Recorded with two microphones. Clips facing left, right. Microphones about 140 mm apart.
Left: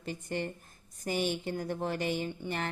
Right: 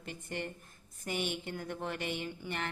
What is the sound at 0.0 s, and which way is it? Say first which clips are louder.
Speech: left 5 dB; 35° left (ahead or behind).